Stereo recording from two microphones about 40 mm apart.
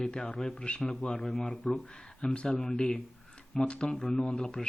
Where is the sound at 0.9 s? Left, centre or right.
Centre.